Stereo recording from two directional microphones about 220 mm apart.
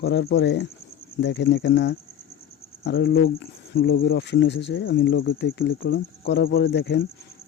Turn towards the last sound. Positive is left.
turn(degrees=50)  # may be behind; listen again after turning